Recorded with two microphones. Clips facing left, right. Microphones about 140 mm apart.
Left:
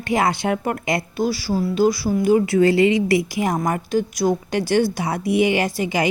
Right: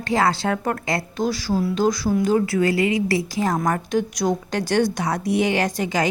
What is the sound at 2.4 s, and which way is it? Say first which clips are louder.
A woman's voice: left 4 dB; 25° left (ahead or behind).